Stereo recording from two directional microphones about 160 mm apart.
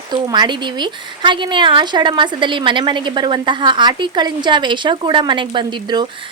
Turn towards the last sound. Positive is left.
turn(degrees=-30)  # may be behind; listen again after turning